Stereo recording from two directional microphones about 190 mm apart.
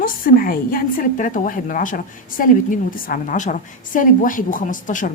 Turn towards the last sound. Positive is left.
turn(degrees=45)  # may be behind; listen again after turning